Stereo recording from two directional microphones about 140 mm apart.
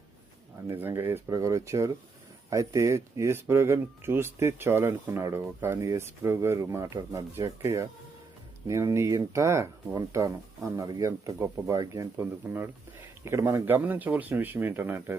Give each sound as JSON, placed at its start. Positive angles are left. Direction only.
{"t": 0.7, "sound": "speech", "side_deg": -15}